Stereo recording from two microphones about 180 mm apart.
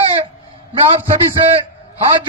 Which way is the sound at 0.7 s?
30° right (ahead or behind).